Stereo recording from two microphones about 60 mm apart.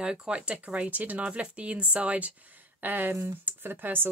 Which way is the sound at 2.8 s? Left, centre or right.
Right.